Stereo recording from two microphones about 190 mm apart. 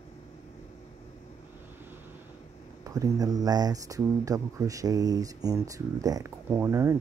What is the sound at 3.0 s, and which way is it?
Speech, 20° right (ahead or behind).